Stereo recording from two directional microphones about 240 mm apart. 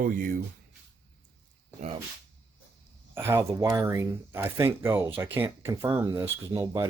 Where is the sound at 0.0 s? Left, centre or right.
Right.